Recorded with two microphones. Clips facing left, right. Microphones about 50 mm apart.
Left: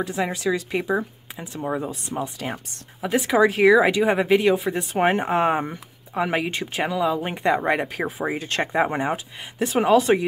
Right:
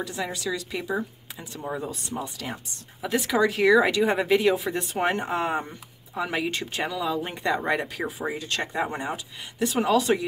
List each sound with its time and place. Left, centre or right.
0.0 s speech: left
2.3 s speech: left
3.0 s speech: centre
3.7 s speech: centre
4.9 s speech: left